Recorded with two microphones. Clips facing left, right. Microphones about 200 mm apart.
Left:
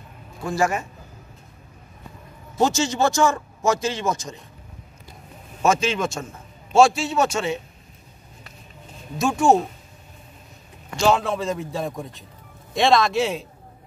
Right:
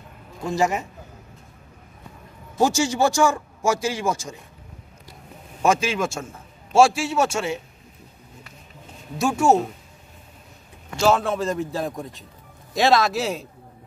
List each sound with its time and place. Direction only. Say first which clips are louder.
0.5 s a man's voice: even; 20° right (ahead or behind)
2.6 s a man's voice: right 1 dB; 10° right (ahead or behind)
5.6 s a man's voice: even; 10° right (ahead or behind)
9.2 s a man's voice: left 1 dB; 5° right (ahead or behind)
11.0 s a man's voice: even; centre (ahead or behind)